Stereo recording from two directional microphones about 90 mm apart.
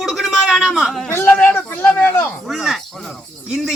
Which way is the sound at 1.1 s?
30° left (ahead or behind).